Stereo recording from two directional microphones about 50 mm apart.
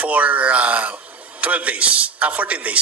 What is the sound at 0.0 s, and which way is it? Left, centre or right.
A man's voice, right.